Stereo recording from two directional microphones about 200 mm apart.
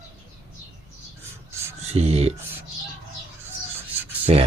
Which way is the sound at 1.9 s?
30° right (ahead or behind).